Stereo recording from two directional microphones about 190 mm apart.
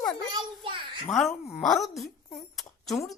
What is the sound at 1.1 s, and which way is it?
Speech, centre (ahead or behind).